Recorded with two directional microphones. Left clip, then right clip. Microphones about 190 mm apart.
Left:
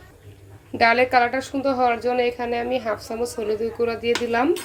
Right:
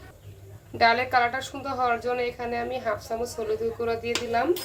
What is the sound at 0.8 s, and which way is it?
A woman's voice, 20° left (ahead or behind).